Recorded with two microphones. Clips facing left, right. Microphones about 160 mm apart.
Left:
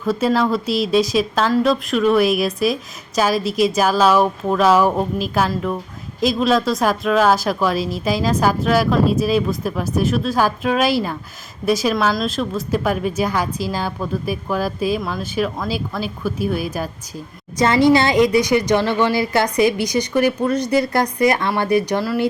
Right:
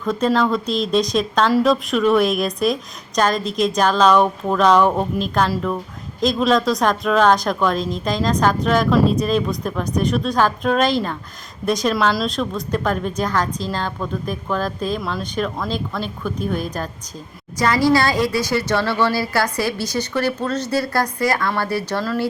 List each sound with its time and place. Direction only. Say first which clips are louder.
0.0 s a woman's voice: left 1 dB; 5° left (ahead or behind)
17.6 s a woman's voice: left 3 dB; 20° left (ahead or behind)